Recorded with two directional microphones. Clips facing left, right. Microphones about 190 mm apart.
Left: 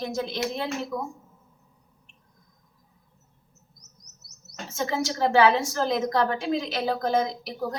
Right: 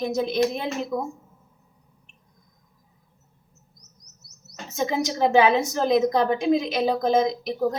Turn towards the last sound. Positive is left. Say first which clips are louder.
# right 7 dB
turn(degrees=-20)  # may be behind; listen again after turning